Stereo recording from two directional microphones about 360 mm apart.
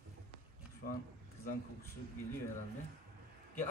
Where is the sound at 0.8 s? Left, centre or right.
Left.